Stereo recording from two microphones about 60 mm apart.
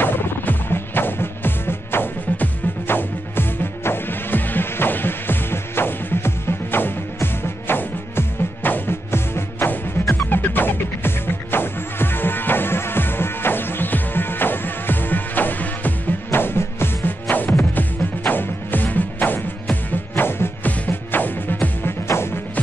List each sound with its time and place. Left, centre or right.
0.0 s music: left
22.0 s music: left